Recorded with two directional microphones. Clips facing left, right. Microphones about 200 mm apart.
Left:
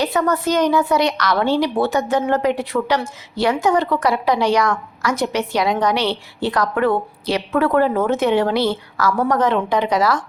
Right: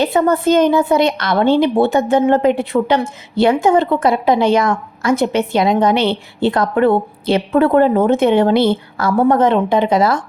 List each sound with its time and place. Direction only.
0.0 s a woman's voice: 25° right (ahead or behind)